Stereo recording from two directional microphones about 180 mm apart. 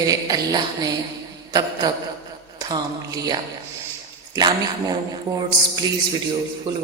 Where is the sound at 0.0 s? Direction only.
20° right (ahead or behind).